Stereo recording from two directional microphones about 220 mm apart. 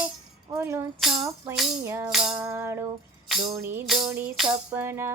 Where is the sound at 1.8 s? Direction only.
15° right (ahead or behind).